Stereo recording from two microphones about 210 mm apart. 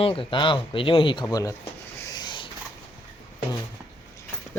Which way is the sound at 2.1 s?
20° left (ahead or behind).